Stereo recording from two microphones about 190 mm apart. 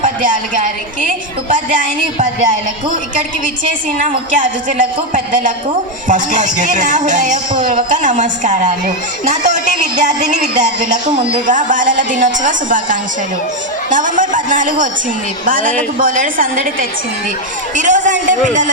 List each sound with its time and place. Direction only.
0.0 s a woman's voice: 45° right (ahead or behind)
5.1 s a woman's voice: 45° right (ahead or behind)
6.1 s music: 40° right (ahead or behind)
11.4 s a woman's voice: 45° right (ahead or behind)
17.7 s music: 40° right (ahead or behind)